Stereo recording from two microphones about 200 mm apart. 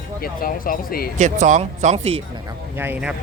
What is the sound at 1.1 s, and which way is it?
Speech, 40° right (ahead or behind).